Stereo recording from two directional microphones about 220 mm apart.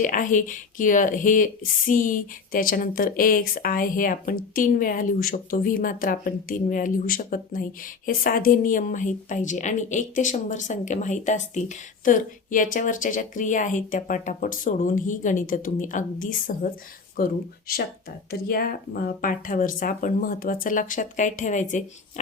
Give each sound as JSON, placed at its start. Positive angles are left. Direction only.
{"t": 0.0, "sound": "speech", "side_deg": 35}